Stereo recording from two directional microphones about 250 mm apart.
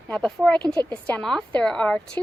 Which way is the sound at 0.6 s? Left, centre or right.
Centre.